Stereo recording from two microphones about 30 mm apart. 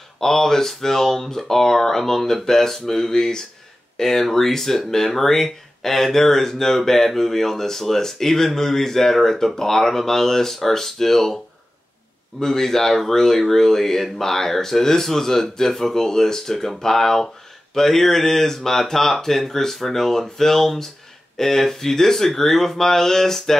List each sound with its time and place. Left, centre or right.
0.2 s speech: centre
12.4 s speech: centre